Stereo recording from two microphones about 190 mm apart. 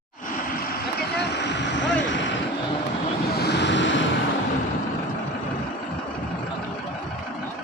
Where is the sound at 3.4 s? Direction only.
60° left (ahead or behind).